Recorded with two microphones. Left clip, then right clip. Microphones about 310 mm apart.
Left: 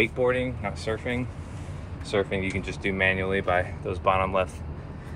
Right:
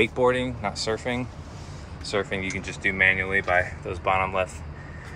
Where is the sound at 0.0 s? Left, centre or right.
Centre.